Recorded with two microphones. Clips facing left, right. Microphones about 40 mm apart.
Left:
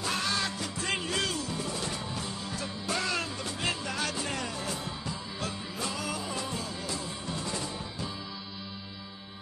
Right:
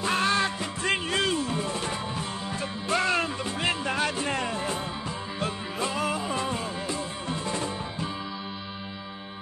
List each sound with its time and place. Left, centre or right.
0.0 s music: right